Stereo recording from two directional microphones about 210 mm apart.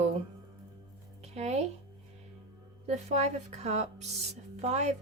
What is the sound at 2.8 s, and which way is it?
A woman's voice, 30° right (ahead or behind).